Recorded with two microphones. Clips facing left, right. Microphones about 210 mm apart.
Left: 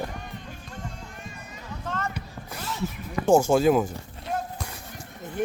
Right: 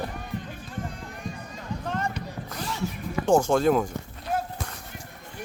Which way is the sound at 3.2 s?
10° left (ahead or behind).